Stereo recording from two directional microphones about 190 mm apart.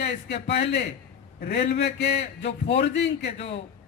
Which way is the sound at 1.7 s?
65° left (ahead or behind).